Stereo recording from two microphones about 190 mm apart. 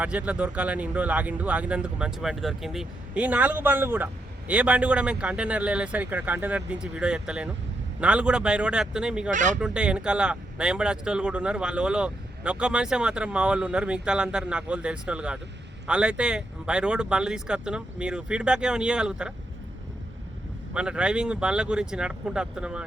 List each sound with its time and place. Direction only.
0.0 s speech: 5° right (ahead or behind)
9.3 s speech: 40° right (ahead or behind)
9.6 s speech: 5° right (ahead or behind)
20.7 s speech: 5° right (ahead or behind)